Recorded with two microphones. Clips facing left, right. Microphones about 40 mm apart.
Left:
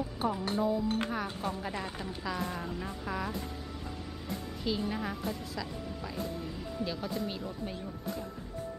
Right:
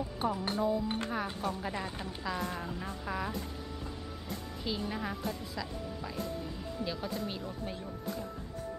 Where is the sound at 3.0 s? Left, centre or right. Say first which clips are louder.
Even; centre.